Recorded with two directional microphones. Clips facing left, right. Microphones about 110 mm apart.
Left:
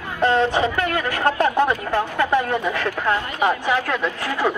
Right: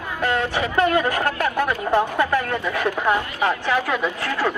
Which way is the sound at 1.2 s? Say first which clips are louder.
Left 4 dB; 20° left (ahead or behind).